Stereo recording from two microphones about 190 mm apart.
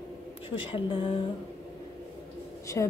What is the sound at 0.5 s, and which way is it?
Speech, 25° left (ahead or behind).